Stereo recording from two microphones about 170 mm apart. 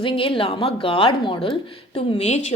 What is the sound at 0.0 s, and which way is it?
Speech, 30° left (ahead or behind).